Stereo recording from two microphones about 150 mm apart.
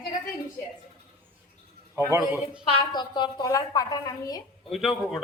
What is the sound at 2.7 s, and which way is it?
A woman's voice, 30° left (ahead or behind).